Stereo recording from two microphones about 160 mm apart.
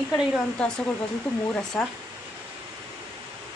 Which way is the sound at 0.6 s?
5° left (ahead or behind).